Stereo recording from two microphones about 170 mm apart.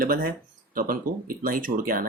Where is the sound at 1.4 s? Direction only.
55° right (ahead or behind).